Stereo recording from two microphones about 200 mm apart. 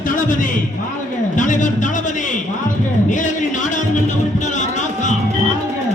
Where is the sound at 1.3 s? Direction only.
40° left (ahead or behind).